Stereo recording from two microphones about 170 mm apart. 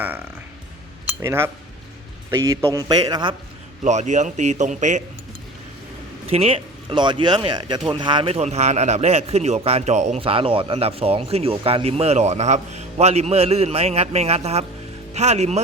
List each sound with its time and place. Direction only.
1.2 s a man's voice: 15° right (ahead or behind)
3.8 s a man's voice: 45° right (ahead or behind)
6.3 s a man's voice: 35° right (ahead or behind)